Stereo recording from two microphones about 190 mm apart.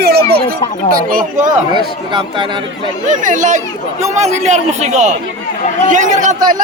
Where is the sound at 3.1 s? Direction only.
40° right (ahead or behind).